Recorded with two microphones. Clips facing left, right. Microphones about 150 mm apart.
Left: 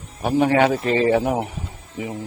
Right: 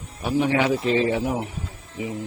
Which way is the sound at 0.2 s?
50° left (ahead or behind).